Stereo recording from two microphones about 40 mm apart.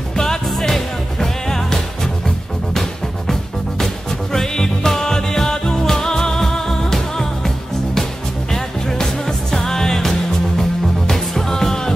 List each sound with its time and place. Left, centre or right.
0.1 s music: centre